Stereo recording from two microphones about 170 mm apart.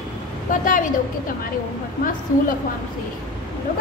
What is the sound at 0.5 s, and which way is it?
Speech, 50° left (ahead or behind).